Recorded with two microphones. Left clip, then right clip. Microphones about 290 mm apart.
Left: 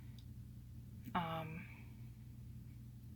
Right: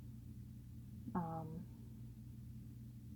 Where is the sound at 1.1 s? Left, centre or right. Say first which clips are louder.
Left 4 dB; left.